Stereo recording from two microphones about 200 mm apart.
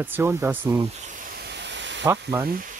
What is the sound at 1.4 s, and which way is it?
Hiss, 60° right (ahead or behind).